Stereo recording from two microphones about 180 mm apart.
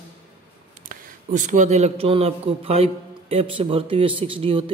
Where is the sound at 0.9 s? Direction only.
45° right (ahead or behind).